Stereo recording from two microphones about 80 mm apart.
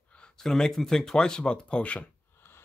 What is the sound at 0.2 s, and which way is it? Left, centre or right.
Speech, centre.